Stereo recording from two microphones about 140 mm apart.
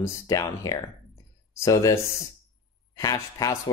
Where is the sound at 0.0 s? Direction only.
25° left (ahead or behind).